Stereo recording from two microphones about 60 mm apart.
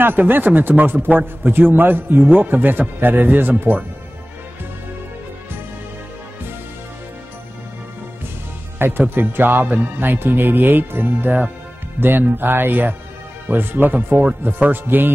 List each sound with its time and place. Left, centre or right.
0.0 s a man's voice: right
8.7 s a man's voice: right